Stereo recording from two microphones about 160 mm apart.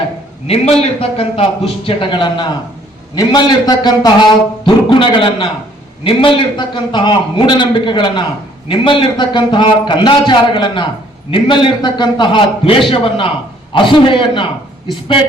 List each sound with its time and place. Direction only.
0.4 s a man's voice: 40° left (ahead or behind)